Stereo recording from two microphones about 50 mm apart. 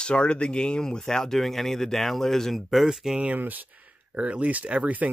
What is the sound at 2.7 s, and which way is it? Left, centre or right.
Speech, centre.